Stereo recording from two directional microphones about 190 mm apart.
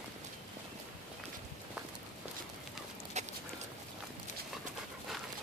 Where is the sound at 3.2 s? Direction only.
35° right (ahead or behind).